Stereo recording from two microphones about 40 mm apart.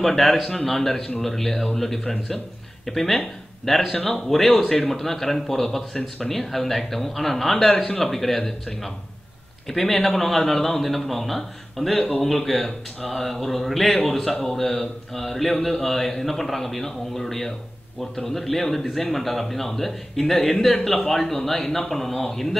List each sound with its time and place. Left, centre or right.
0.0 s speech: centre
7.7 s speech: centre
8.0 s speech: centre